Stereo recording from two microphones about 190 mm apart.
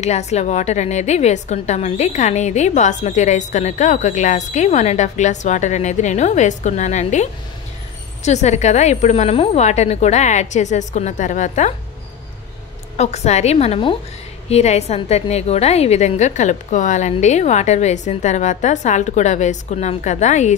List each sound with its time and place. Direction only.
0.0 s a woman's voice: 35° left (ahead or behind)
12.9 s a woman's voice: 35° left (ahead or behind)